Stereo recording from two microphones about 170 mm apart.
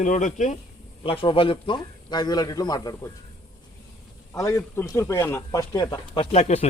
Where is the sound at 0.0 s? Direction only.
45° left (ahead or behind).